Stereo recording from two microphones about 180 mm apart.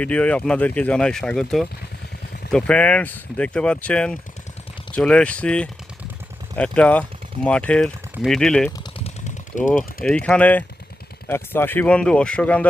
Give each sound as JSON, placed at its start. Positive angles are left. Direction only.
{"t": 0.0, "sound": "speech", "side_deg": 5}
{"t": 9.0, "sound": "a sound", "side_deg": 45}
{"t": 10.0, "sound": "speech", "side_deg": 5}